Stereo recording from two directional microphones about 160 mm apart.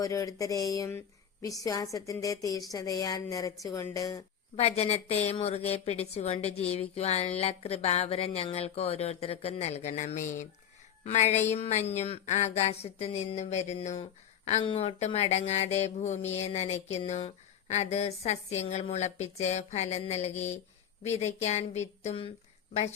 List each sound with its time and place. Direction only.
0.0 s speech: 20° left (ahead or behind)
4.5 s a woman's voice: 40° left (ahead or behind)